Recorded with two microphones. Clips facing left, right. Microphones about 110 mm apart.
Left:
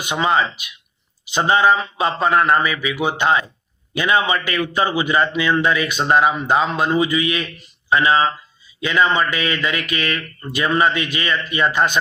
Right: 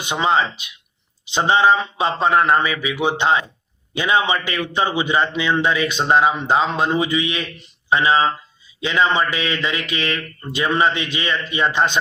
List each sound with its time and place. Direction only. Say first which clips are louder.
0.0 s a man's voice: even; 25° right (ahead or behind)